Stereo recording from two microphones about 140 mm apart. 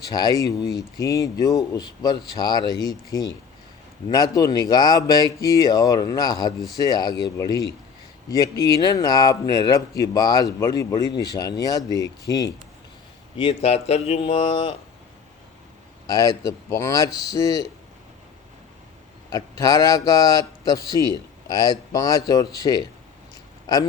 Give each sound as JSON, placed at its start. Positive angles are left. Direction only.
{"t": 0.0, "sound": "speech", "side_deg": 30}
{"t": 13.3, "sound": "a man's voice", "side_deg": 40}
{"t": 16.0, "sound": "speech", "side_deg": 25}
{"t": 19.3, "sound": "speech", "side_deg": 25}